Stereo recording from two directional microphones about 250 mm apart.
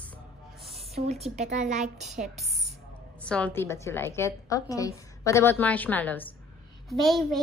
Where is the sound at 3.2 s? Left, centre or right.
Centre.